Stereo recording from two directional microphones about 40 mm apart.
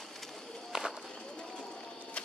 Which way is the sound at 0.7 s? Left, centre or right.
Centre.